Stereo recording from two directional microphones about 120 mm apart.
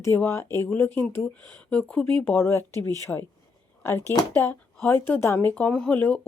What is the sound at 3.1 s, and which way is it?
Speech, 10° left (ahead or behind).